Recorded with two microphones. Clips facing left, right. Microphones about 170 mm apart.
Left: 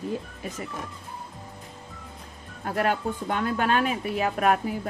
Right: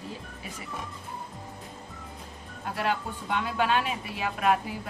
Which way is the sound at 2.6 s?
50° left (ahead or behind).